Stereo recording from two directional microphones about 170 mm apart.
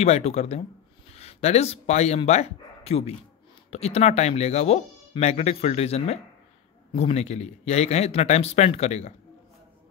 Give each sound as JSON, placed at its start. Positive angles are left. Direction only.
{"t": 0.0, "sound": "speech", "side_deg": 40}